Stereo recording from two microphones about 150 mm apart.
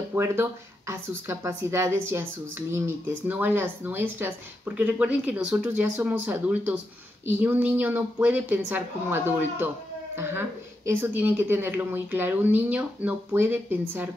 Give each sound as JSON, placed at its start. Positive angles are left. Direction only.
{"t": 0.1, "sound": "speech", "side_deg": -15}